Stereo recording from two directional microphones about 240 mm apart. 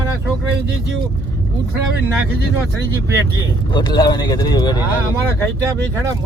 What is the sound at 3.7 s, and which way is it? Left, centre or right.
Speech, centre.